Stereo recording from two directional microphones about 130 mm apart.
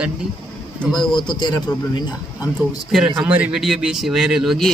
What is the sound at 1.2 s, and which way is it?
A man's voice, 35° left (ahead or behind).